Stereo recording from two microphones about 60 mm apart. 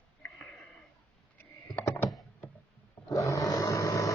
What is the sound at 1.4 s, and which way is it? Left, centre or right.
Computer keyboard, left.